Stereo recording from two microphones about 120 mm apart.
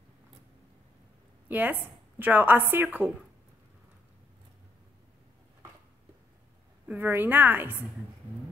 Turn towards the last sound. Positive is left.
turn(degrees=-15)  # may be behind; listen again after turning